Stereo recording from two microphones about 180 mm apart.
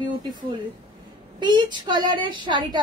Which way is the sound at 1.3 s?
25° right (ahead or behind).